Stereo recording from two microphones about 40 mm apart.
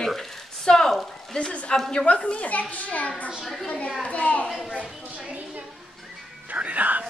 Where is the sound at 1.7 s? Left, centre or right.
Centre.